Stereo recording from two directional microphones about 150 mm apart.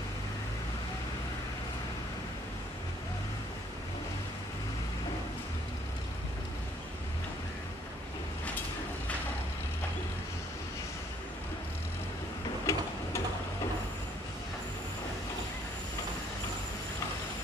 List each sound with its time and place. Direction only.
12.7 s tick-tock: 20° left (ahead or behind)